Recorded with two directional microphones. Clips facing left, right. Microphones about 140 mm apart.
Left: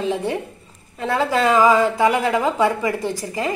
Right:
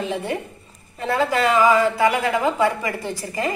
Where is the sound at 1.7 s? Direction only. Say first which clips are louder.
Left 1 dB; 25° left (ahead or behind).